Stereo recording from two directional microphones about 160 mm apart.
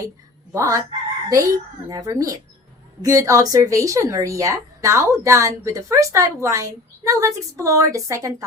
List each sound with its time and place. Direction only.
0.5 s a woman's voice: 20° right (ahead or behind)